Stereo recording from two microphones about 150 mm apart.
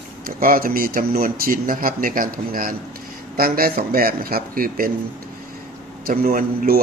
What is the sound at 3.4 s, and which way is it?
Speech, 80° right.